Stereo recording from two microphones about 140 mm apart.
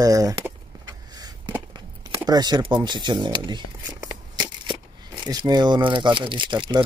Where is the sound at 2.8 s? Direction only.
35° right (ahead or behind).